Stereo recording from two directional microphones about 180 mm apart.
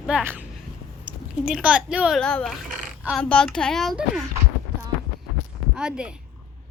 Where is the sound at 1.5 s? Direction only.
5° right (ahead or behind).